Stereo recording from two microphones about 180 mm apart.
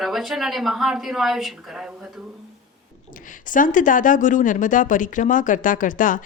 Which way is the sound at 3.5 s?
45° left (ahead or behind).